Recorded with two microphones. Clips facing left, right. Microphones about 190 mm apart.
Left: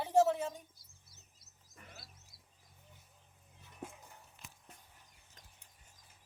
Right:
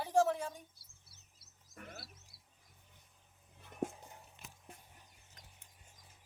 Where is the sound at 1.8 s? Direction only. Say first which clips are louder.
Right 6 dB; 65° right (ahead or behind).